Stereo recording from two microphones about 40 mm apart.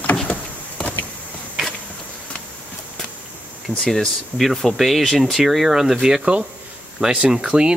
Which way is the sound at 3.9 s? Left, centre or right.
Centre.